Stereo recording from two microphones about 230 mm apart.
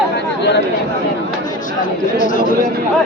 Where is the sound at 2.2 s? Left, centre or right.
Left.